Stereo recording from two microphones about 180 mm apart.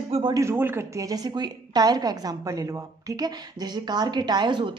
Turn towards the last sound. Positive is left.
turn(degrees=-25)  # may be behind; listen again after turning